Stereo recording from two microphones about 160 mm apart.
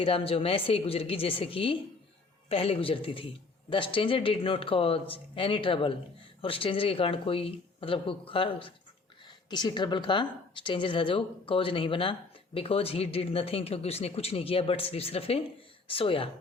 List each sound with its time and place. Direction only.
0.0 s a man's voice: 35° left (ahead or behind)